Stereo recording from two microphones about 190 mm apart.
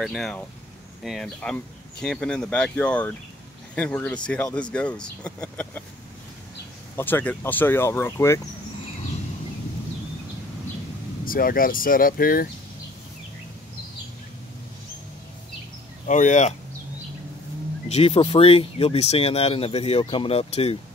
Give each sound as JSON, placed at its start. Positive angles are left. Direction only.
{"t": 0.0, "sound": "speech", "side_deg": 0}
{"t": 7.0, "sound": "speech", "side_deg": 10}
{"t": 11.2, "sound": "speech", "side_deg": 50}
{"t": 16.1, "sound": "speech", "side_deg": 40}
{"t": 17.8, "sound": "speech", "side_deg": 30}